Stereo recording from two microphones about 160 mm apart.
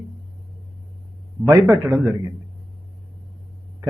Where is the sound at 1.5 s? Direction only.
15° right (ahead or behind).